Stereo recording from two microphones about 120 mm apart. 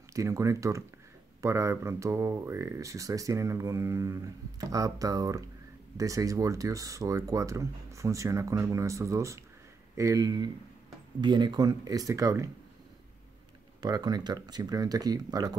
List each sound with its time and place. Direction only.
0.1 s speech: 25° right (ahead or behind)
13.7 s speech: 35° right (ahead or behind)